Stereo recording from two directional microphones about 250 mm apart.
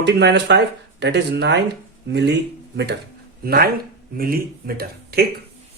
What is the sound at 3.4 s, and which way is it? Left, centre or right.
Speech, right.